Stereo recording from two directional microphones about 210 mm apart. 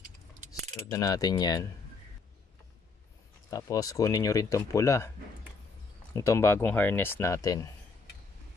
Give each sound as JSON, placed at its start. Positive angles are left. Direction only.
{"t": 0.9, "sound": "speech", "side_deg": 15}
{"t": 3.4, "sound": "speech", "side_deg": 15}
{"t": 6.1, "sound": "speech", "side_deg": 15}